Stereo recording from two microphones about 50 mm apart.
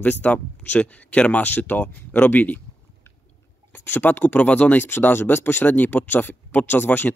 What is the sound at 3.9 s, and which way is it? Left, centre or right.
Speech, left.